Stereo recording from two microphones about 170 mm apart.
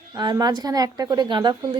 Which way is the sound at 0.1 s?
20° right (ahead or behind).